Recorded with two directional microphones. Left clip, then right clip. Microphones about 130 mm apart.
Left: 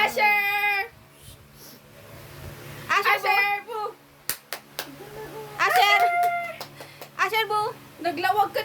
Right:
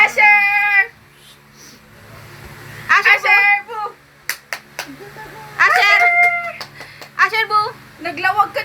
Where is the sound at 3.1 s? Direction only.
60° left (ahead or behind).